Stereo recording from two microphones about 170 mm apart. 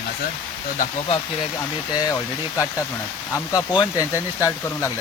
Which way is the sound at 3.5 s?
25° left (ahead or behind).